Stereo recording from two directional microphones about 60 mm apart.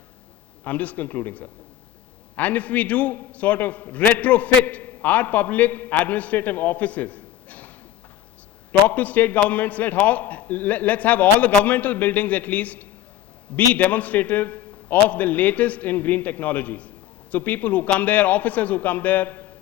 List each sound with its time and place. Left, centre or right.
0.6 s a man's voice: left
8.9 s a man's voice: left